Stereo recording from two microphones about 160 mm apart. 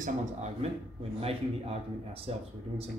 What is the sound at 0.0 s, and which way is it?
Speech, 45° right (ahead or behind).